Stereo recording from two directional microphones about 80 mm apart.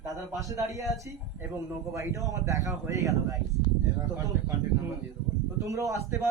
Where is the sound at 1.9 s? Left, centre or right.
Right.